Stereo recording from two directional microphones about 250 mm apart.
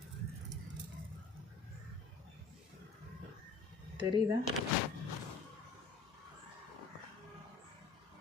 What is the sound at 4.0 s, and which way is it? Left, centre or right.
Speech, centre.